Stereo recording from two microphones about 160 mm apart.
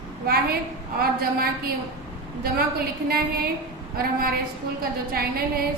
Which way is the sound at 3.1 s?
70° right (ahead or behind).